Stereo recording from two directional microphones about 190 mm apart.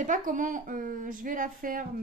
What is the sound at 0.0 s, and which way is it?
Speech, 45° right (ahead or behind).